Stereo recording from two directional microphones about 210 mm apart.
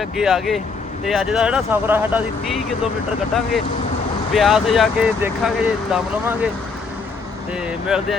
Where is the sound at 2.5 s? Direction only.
Centre (ahead or behind).